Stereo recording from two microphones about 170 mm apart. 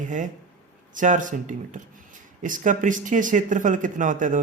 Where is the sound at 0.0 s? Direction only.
50° right (ahead or behind).